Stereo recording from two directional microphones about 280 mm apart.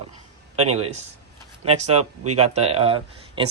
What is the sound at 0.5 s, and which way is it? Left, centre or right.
Speech, right.